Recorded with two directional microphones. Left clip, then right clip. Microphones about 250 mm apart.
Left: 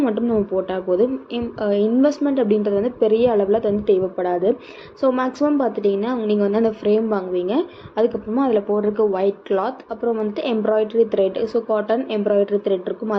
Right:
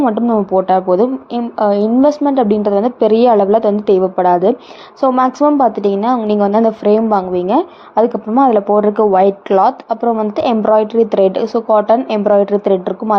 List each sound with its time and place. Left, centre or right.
0.0 s a woman's voice: right